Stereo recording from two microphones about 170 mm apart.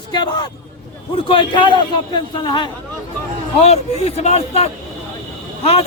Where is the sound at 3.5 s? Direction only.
40° left (ahead or behind).